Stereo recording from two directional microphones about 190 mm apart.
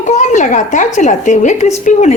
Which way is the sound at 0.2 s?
40° left (ahead or behind).